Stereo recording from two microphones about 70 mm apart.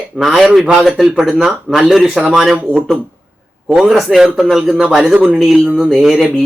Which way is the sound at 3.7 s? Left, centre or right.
Centre.